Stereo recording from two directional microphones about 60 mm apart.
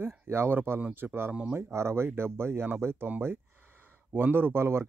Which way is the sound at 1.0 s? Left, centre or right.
Right.